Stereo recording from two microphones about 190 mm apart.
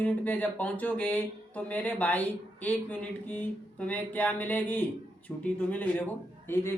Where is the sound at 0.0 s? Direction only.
10° left (ahead or behind).